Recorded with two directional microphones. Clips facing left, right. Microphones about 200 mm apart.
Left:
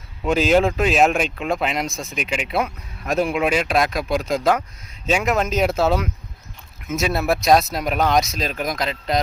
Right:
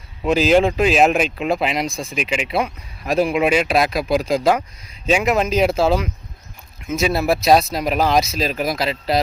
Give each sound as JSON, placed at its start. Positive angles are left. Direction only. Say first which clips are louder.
{"t": 0.2, "sound": "speech", "louder": "right 2 dB", "side_deg": 0}
{"t": 1.9, "sound": "speech", "louder": "right 3 dB", "side_deg": -30}
{"t": 2.1, "sound": "a man's voice", "louder": "right 2 dB", "side_deg": -5}
{"t": 5.4, "sound": "speech", "louder": "right 2 dB", "side_deg": -5}